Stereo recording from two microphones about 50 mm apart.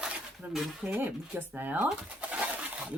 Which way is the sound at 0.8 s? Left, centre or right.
Centre.